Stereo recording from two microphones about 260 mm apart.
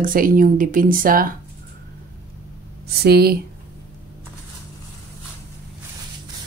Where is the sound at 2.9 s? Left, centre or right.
Right.